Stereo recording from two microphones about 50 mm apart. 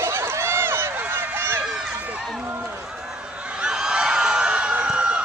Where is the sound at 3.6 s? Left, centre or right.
Centre.